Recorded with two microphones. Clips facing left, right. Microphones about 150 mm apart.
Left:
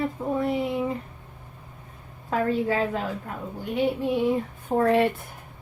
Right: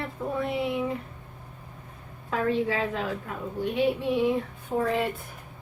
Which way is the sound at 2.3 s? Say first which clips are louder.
Left 2 dB; 45° left (ahead or behind).